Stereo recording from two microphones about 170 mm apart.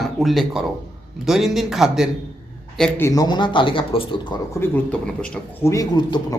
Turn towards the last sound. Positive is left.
turn(degrees=25)  # may be behind; listen again after turning